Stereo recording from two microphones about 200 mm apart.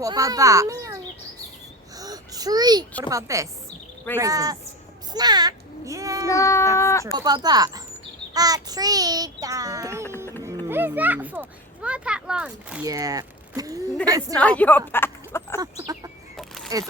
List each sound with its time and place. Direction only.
0.0 s a child's voice: 15° right (ahead or behind)
2.0 s babbling: 20° right (ahead or behind)
3.0 s a child's voice: 15° right (ahead or behind)
6.2 s speech: 15° left (ahead or behind)
7.2 s a child's voice: 20° right (ahead or behind)
12.8 s a child's voice: 20° right (ahead or behind)
14.3 s speech: 5° left (ahead or behind)
16.7 s a child's voice: 15° right (ahead or behind)